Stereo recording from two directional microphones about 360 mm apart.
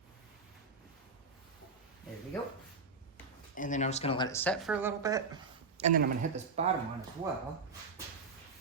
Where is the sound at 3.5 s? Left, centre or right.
Left; by 6.7 s centre.